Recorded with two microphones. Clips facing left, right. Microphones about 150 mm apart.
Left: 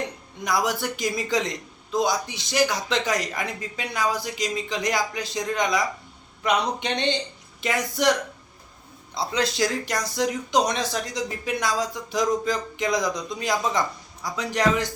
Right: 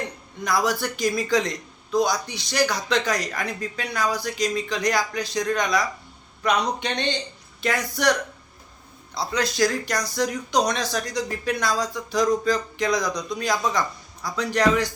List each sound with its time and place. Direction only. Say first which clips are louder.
0.4 s speech: right 1 dB; 20° left (ahead or behind)
9.1 s speech: right 1 dB; 25° left (ahead or behind)